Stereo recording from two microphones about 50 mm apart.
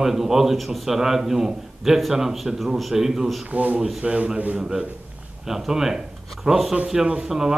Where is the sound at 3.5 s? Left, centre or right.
Right.